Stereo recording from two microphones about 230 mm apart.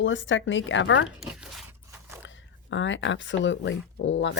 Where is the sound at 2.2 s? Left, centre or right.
Left.